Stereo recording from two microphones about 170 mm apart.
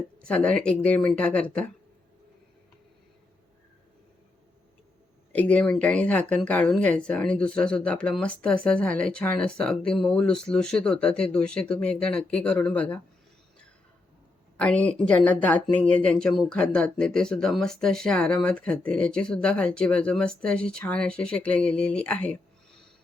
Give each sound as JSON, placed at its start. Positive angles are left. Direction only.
{"t": 0.3, "sound": "speech", "side_deg": 5}
{"t": 5.3, "sound": "speech", "side_deg": 10}
{"t": 14.6, "sound": "speech", "side_deg": 5}